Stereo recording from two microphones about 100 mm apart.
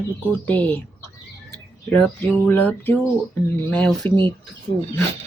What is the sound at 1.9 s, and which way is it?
A woman's voice, 15° left (ahead or behind).